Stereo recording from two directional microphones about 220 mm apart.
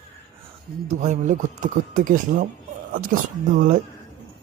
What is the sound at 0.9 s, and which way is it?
Speech, 35° right (ahead or behind).